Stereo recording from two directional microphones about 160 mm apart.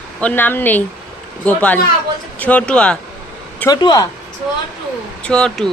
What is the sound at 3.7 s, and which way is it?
Speech, 25° left (ahead or behind).